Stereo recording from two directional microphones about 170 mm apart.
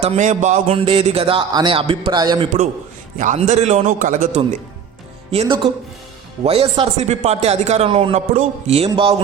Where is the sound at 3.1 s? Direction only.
45° right (ahead or behind).